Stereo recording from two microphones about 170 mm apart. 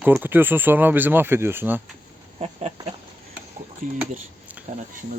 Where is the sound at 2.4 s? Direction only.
40° right (ahead or behind).